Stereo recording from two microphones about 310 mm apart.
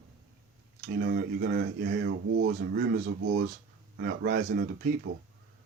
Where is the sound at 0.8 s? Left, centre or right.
Right.